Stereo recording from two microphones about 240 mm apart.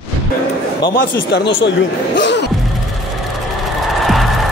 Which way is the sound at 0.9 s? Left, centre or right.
Left.